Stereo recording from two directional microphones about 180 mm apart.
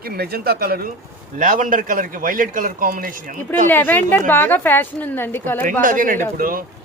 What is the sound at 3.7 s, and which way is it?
A woman's voice, 10° left (ahead or behind).